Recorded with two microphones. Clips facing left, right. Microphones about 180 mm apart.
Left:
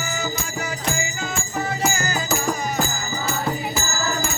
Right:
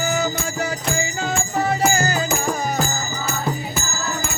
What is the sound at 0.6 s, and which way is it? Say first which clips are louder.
Music: right 3 dB; 30° right (ahead or behind).